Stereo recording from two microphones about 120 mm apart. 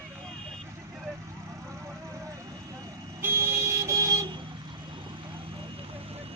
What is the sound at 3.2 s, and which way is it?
Vehicle, 20° right (ahead or behind).